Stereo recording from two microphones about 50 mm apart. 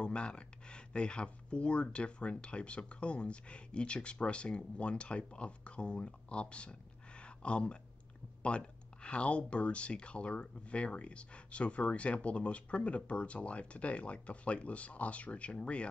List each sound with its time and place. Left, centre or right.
0.0 s speech: centre